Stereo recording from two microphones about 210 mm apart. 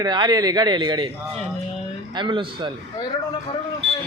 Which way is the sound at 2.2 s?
20° right (ahead or behind).